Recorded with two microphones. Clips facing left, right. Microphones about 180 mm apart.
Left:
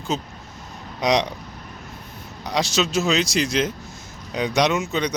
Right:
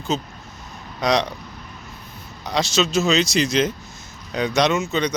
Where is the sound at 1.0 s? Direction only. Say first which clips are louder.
Even; 15° left (ahead or behind).